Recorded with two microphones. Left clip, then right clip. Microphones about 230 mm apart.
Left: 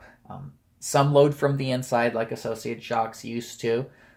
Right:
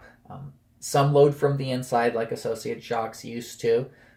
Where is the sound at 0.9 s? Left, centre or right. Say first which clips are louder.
Even; left.